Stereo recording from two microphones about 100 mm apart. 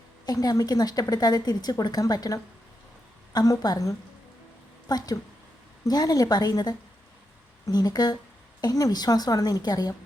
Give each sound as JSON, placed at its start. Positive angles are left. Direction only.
{"t": 0.3, "sound": "a woman's voice", "side_deg": 35}